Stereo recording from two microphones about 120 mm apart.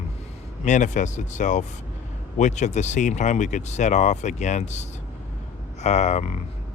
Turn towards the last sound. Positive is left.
turn(degrees=70)  # may be behind; listen again after turning